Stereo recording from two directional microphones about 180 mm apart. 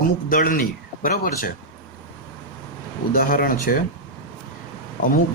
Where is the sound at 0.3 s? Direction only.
50° left (ahead or behind).